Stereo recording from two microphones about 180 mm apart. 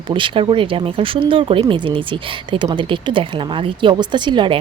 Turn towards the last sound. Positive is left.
turn(degrees=-25)  # may be behind; listen again after turning